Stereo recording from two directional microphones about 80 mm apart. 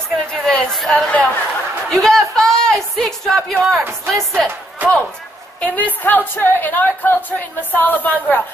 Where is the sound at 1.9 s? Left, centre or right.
Centre.